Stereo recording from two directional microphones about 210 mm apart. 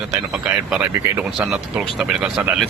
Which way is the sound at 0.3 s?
5° right (ahead or behind).